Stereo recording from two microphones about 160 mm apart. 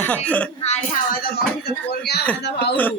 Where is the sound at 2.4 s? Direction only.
90° left.